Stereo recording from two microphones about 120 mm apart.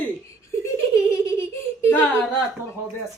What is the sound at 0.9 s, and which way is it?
Giggle, 25° left (ahead or behind).